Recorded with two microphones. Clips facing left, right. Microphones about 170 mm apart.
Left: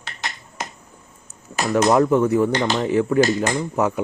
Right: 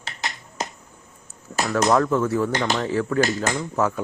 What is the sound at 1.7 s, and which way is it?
Speech, 20° left (ahead or behind).